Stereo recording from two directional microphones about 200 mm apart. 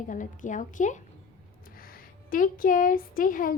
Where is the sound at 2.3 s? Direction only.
45° left (ahead or behind).